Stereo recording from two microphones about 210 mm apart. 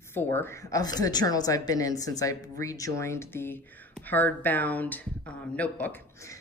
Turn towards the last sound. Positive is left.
turn(degrees=10)  # may be behind; listen again after turning